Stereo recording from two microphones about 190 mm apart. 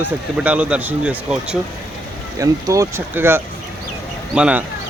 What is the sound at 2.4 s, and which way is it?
Speech, 15° right (ahead or behind).